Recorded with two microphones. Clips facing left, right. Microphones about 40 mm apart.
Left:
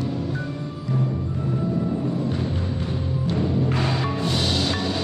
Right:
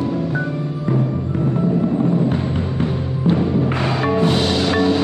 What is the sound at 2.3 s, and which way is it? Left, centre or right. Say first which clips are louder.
Music: right 5 dB; right.